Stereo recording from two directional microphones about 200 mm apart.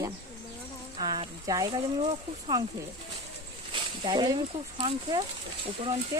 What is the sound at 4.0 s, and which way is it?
Speech, 25° right (ahead or behind).